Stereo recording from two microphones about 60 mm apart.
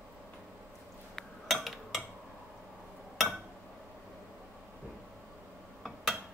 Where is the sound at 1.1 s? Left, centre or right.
Centre.